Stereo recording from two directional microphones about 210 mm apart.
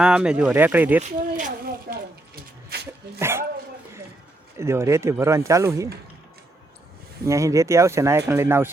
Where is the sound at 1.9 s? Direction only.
45° right (ahead or behind).